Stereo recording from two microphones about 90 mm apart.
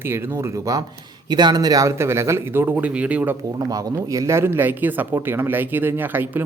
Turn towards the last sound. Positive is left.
turn(degrees=-20)  # may be behind; listen again after turning